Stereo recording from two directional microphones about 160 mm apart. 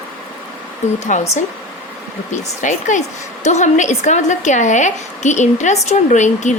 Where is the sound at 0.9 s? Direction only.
50° left (ahead or behind).